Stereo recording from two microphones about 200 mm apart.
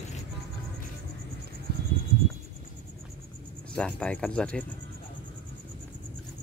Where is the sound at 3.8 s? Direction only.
5° left (ahead or behind).